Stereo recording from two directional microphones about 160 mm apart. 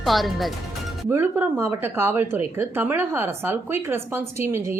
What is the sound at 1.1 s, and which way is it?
Speech, 15° right (ahead or behind).